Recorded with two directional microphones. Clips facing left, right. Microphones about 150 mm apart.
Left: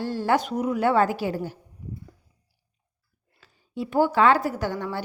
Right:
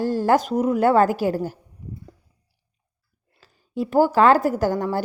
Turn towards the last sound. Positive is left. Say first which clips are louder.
# right 6 dB
turn(degrees=-40)  # may be behind; listen again after turning